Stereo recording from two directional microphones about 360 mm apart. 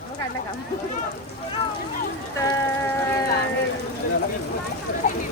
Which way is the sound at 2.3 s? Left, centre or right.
Centre.